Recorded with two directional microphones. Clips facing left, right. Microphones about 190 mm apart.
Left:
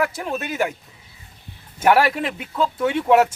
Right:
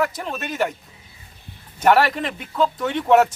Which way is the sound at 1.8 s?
10° left (ahead or behind).